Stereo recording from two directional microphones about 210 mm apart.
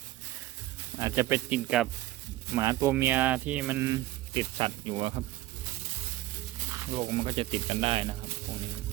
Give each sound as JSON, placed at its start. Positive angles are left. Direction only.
{"t": 0.9, "sound": "speech", "side_deg": -15}
{"t": 2.5, "sound": "speech", "side_deg": -15}
{"t": 6.9, "sound": "speech", "side_deg": -30}